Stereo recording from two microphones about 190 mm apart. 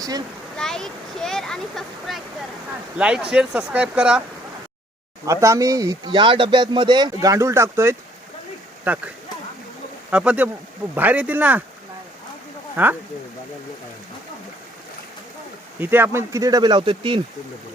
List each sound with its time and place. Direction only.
0.5 s speech: 5° left (ahead or behind)
5.2 s speech: 15° right (ahead or behind)
10.1 s speech: 5° right (ahead or behind)
12.7 s speech: 10° right (ahead or behind)
15.8 s speech: 10° right (ahead or behind); by 17.2 s 25° right (ahead or behind)